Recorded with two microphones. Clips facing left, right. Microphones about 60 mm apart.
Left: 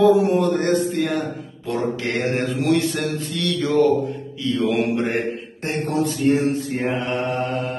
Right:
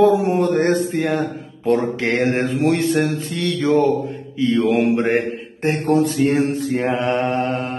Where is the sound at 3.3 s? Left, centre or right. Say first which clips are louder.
Right 2 dB; right.